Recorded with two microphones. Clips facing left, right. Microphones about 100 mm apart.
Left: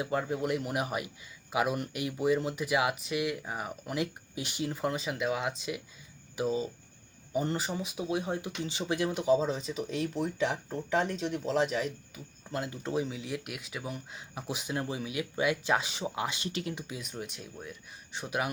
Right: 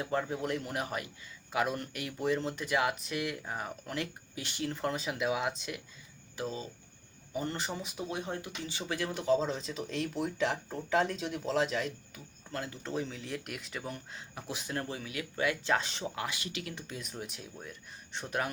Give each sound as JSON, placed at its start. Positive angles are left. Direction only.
{"t": 0.0, "sound": "speech", "side_deg": 5}
{"t": 6.3, "sound": "speech", "side_deg": 15}
{"t": 7.5, "sound": "speech", "side_deg": 5}
{"t": 8.4, "sound": "speech", "side_deg": 20}
{"t": 12.5, "sound": "speech", "side_deg": 15}
{"t": 16.1, "sound": "speech", "side_deg": 20}
{"t": 16.8, "sound": "speech", "side_deg": 5}